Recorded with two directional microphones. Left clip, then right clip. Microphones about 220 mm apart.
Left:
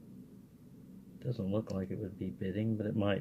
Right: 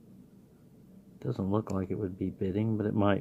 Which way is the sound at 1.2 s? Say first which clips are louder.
Right 5 dB; 40° right (ahead or behind).